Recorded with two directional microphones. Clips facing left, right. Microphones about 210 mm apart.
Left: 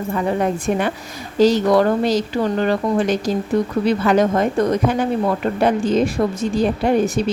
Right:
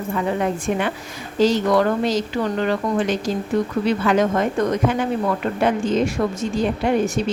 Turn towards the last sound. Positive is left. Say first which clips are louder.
# left 2 dB
turn(degrees=35)  # may be behind; listen again after turning